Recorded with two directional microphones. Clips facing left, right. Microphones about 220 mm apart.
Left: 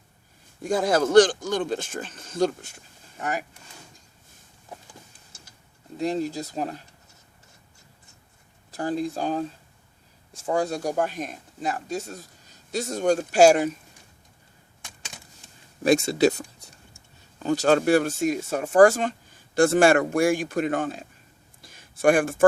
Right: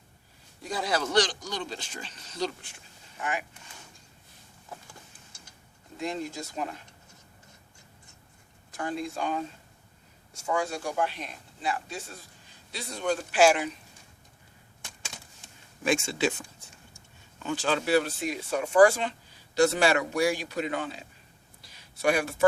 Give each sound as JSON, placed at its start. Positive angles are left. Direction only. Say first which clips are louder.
{"t": 0.6, "sound": "speech", "louder": "left 8 dB", "side_deg": 50}
{"t": 6.0, "sound": "speech", "louder": "left 7 dB", "side_deg": 35}
{"t": 8.7, "sound": "speech", "louder": "left 6 dB", "side_deg": 35}
{"t": 15.8, "sound": "speech", "louder": "left 8 dB", "side_deg": 40}
{"t": 21.6, "sound": "a sound", "louder": "left 7 dB", "side_deg": 50}